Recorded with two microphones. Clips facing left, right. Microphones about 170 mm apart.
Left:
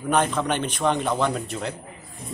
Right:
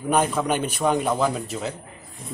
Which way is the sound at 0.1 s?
10° right (ahead or behind).